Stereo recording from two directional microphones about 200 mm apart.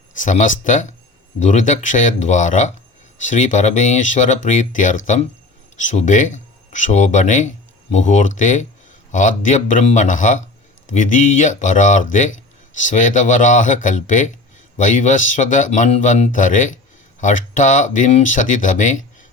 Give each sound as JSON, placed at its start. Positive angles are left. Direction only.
{"t": 0.2, "sound": "speech", "side_deg": 40}